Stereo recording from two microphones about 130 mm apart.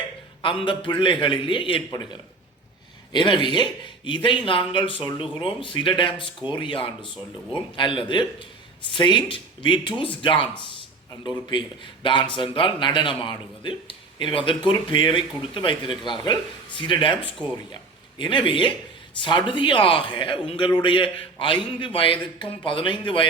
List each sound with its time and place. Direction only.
0.4 s a man's voice: 40° left (ahead or behind)